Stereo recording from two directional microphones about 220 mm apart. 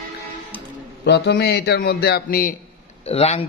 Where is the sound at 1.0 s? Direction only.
50° left (ahead or behind).